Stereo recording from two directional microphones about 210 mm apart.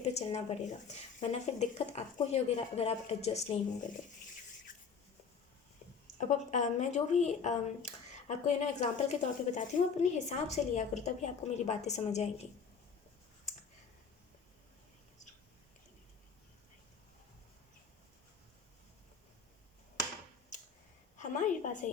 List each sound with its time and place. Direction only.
0.0 s speech: 30° left (ahead or behind)
6.1 s speech: 35° left (ahead or behind)
21.2 s a sound: 35° left (ahead or behind)